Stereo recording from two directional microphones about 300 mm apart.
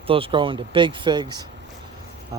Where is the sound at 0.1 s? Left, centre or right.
Centre.